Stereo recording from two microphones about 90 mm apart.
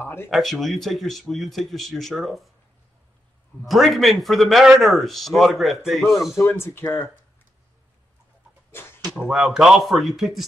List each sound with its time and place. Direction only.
0.0 s speech: 25° left (ahead or behind)
0.3 s a man's voice: centre (ahead or behind)
3.6 s a man's voice: centre (ahead or behind)
6.3 s speech: 25° left (ahead or behind)
8.7 s a sound: 25° left (ahead or behind)
9.2 s a man's voice: 5° right (ahead or behind)